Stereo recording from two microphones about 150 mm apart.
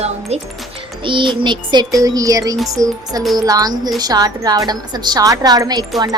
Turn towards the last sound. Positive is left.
turn(degrees=-25)  # may be behind; listen again after turning